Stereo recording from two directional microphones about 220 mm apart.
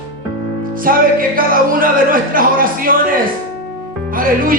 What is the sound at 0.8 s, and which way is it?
Music, 40° right (ahead or behind).